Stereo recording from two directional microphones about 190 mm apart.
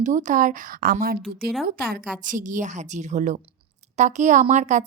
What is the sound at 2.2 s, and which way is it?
A woman's voice, 45° right (ahead or behind).